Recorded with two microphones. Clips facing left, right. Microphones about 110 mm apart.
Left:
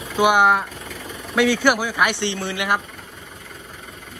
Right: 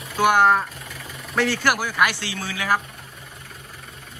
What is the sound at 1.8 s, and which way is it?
Speech, 15° left (ahead or behind).